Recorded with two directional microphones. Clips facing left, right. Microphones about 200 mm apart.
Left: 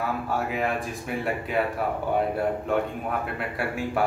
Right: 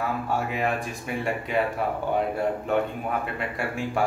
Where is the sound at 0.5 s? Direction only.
Centre (ahead or behind).